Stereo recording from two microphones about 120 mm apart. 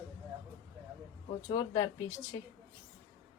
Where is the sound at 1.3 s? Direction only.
45° left (ahead or behind).